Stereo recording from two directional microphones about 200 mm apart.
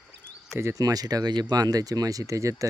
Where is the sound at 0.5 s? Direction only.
15° right (ahead or behind).